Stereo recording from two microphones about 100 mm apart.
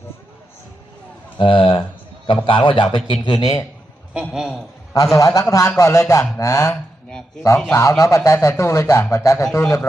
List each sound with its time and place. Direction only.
1.4 s a man's voice: 60° left (ahead or behind)
3.1 s speech: 45° left (ahead or behind)
4.3 s a man's voice: 5° right (ahead or behind)
5.1 s a man's voice: 35° left (ahead or behind)